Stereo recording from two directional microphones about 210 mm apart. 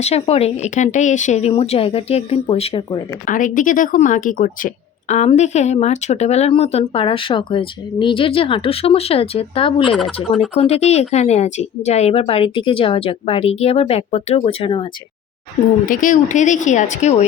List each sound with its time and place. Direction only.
0.0 s speech: 30° left (ahead or behind)
3.2 s speech: 40° left (ahead or behind)
15.9 s speech: 40° left (ahead or behind)